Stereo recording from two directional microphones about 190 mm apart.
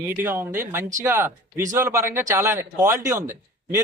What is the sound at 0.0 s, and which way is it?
Speech, 10° right (ahead or behind).